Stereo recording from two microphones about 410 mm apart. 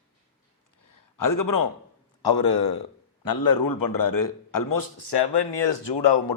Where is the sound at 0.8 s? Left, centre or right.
Left.